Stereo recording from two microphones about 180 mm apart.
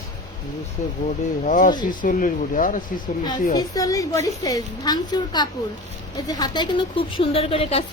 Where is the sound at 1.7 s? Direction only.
25° left (ahead or behind).